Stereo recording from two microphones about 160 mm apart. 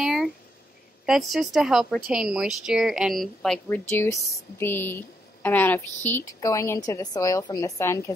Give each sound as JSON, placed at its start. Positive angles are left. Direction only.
{"t": 0.0, "sound": "a sound", "side_deg": 0}
{"t": 1.0, "sound": "speech", "side_deg": 0}
{"t": 3.6, "sound": "speech", "side_deg": 15}